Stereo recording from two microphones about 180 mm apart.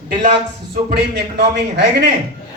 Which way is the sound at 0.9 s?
65° right (ahead or behind).